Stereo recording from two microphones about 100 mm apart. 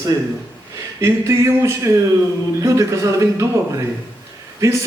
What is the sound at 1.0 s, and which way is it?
A man's voice, 30° right (ahead or behind).